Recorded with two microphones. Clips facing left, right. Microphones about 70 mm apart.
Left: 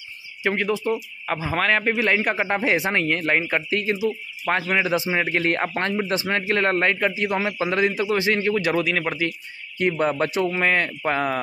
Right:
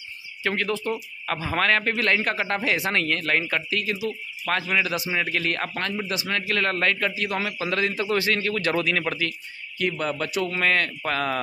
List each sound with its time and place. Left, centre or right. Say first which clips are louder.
0.4 s a man's voice: left 3 dB; centre
9.8 s a man's voice: left 5 dB; left
10.5 s a man's voice: left 2 dB; centre